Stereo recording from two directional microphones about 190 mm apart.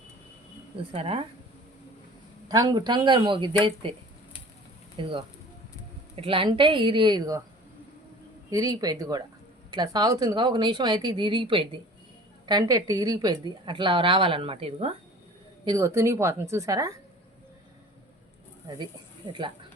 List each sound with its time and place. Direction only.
0.9 s speech: 30° right (ahead or behind)
2.5 s a woman's voice: 20° right (ahead or behind)
4.9 s a woman's voice: 25° right (ahead or behind)
8.4 s a woman's voice: 20° right (ahead or behind)
15.6 s a woman's voice: 15° right (ahead or behind)
18.7 s a woman's voice: 25° right (ahead or behind)